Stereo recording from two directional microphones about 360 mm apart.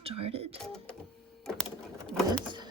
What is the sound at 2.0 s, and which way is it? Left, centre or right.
Pigeon, centre.